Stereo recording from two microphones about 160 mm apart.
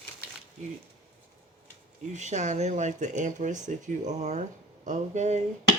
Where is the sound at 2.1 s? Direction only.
50° right (ahead or behind).